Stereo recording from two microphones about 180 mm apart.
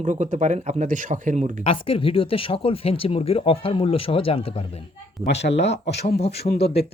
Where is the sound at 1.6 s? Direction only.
30° left (ahead or behind).